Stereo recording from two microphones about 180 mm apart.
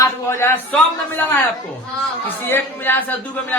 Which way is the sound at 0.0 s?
15° left (ahead or behind).